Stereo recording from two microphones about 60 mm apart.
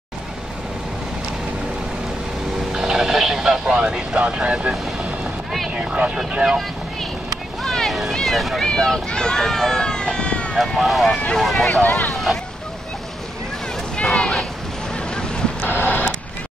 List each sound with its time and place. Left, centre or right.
2.7 s vehicle: centre
3.7 s speech: centre
5.8 s speech: centre
7.6 s a sound: centre
8.6 s speech: centre
10.6 s speech: centre
11.8 s speech: left
12.1 s vehicle: centre
13.9 s a sound: centre
15.0 s boat: centre
15.6 s printer: left